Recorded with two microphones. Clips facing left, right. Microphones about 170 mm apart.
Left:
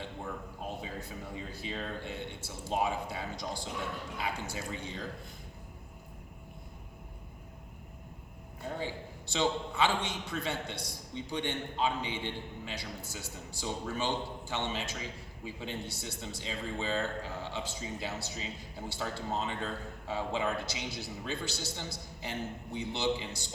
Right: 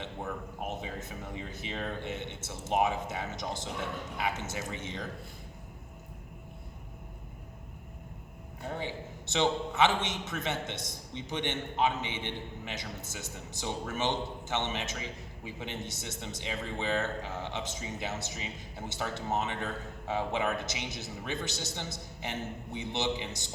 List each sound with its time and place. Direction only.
0.6 s a man's voice: 20° right (ahead or behind)
8.8 s a man's voice: 20° right (ahead or behind)